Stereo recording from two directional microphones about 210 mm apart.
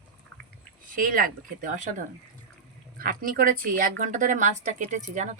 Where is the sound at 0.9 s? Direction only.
40° right (ahead or behind).